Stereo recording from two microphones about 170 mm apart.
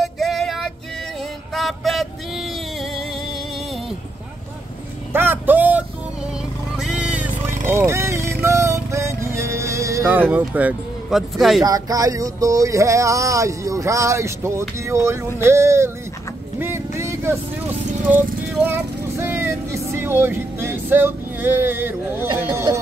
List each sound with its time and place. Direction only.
0.0 s female singing: centre (ahead or behind)
1.5 s music: centre (ahead or behind)
5.1 s vehicle: 10° right (ahead or behind)
10.3 s speech: 10° right (ahead or behind)
11.6 s a sound: 20° right (ahead or behind)
16.5 s vehicle: 15° right (ahead or behind)